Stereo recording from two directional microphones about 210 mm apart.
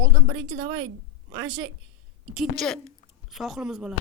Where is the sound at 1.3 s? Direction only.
20° right (ahead or behind).